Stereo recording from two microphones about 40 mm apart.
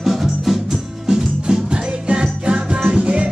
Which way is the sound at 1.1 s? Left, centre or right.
Centre.